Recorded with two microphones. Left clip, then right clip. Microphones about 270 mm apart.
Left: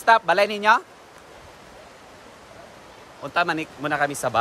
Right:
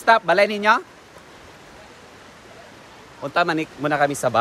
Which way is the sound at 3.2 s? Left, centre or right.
Centre.